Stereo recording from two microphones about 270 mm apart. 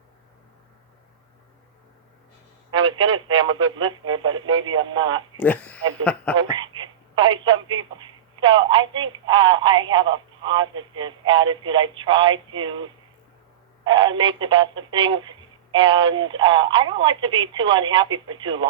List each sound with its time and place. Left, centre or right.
2.7 s a sound: centre
3.8 s speech: centre
5.4 s speech: centre
6.6 s speech: centre